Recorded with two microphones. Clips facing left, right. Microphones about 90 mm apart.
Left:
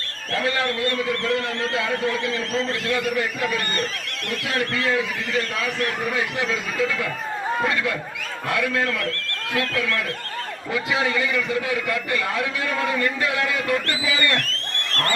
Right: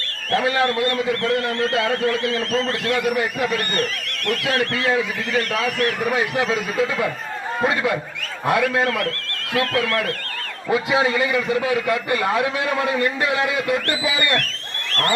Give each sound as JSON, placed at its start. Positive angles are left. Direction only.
{"t": 0.3, "sound": "a man's voice", "side_deg": -20}
{"t": 1.2, "sound": "speech", "side_deg": 20}
{"t": 2.9, "sound": "a man's voice", "side_deg": -20}
{"t": 4.7, "sound": "a man's voice", "side_deg": -25}
{"t": 6.1, "sound": "a man's voice", "side_deg": -20}
{"t": 8.4, "sound": "a man's voice", "side_deg": -25}
{"t": 10.7, "sound": "a man's voice", "side_deg": -25}